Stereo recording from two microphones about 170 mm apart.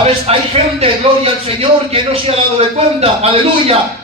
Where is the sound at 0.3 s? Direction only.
35° right (ahead or behind).